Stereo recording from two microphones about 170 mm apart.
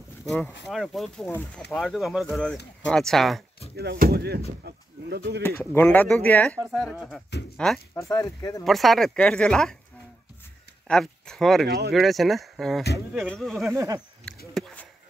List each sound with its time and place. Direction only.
0.2 s speech: centre (ahead or behind)
3.7 s speech: 70° right (ahead or behind)
5.8 s speech: 10° left (ahead or behind)
6.6 s speech: centre (ahead or behind)
8.1 s speech: 20° left (ahead or behind)
8.6 s speech: centre (ahead or behind)
10.9 s speech: 5° left (ahead or behind)
11.6 s speech: 75° right (ahead or behind)
11.9 s speech: centre (ahead or behind)
13.7 s speech: 20° right (ahead or behind)
14.3 s a sound: 5° left (ahead or behind)